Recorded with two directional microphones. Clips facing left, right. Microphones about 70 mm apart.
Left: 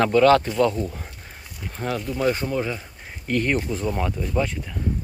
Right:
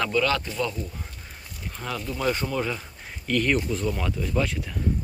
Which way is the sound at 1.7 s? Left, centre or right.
Left.